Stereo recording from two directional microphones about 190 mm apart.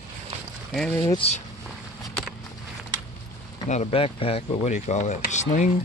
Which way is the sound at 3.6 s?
35° left (ahead or behind).